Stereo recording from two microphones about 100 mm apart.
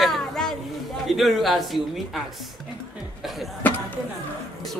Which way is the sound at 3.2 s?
Centre (ahead or behind).